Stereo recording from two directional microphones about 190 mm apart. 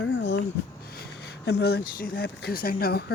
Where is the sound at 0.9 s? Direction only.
60° left (ahead or behind).